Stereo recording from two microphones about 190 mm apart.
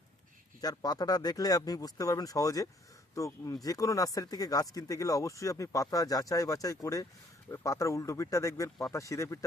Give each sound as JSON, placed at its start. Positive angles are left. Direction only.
{"t": 0.6, "sound": "speech", "side_deg": 20}